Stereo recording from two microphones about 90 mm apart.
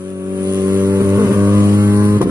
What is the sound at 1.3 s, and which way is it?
Music, 30° right (ahead or behind).